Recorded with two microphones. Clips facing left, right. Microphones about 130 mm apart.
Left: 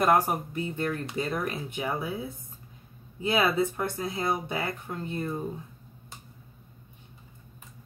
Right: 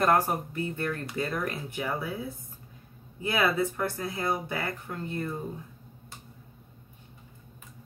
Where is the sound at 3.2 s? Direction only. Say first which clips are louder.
Left 2 dB; 25° left (ahead or behind).